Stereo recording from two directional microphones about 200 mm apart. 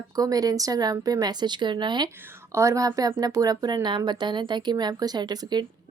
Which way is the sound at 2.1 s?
10° right (ahead or behind).